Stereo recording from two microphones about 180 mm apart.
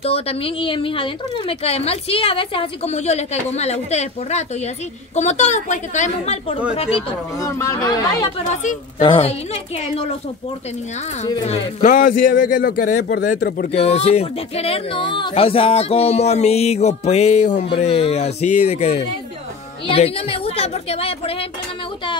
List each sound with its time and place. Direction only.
0.0 s a woman's voice: 35° left (ahead or behind)
7.3 s speech: 15° left (ahead or behind)
9.0 s a woman's voice: 30° left (ahead or behind)
11.4 s speech: 40° left (ahead or behind)
13.7 s a woman's voice: 35° left (ahead or behind)